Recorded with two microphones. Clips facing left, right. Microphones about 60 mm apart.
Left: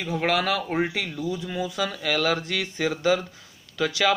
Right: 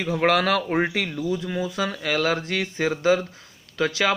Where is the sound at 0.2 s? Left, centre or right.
Right.